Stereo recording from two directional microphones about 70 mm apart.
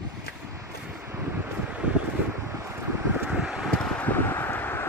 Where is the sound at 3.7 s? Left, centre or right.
Centre.